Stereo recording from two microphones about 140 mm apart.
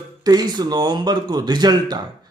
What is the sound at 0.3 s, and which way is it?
Speech, 30° right (ahead or behind).